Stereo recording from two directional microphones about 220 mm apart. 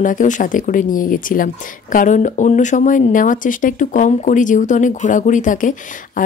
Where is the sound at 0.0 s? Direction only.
35° left (ahead or behind).